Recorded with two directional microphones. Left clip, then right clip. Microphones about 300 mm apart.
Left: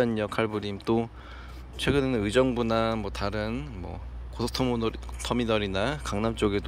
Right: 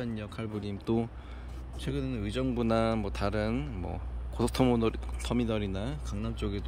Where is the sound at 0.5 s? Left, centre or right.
Centre.